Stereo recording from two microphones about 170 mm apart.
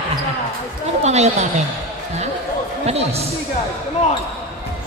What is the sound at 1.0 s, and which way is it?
Speech, 40° right (ahead or behind).